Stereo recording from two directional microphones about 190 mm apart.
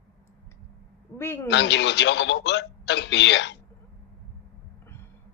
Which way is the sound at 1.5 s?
70° left (ahead or behind).